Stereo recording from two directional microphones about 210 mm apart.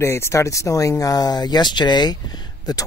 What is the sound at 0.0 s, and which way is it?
Speech, 10° left (ahead or behind).